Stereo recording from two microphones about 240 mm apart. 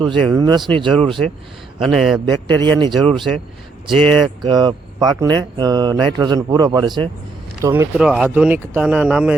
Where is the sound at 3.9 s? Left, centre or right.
Centre.